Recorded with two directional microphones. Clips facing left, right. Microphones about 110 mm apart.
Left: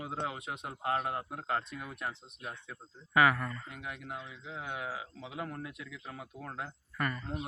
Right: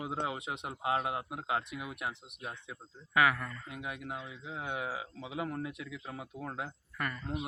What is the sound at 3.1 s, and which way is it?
Speech, centre (ahead or behind).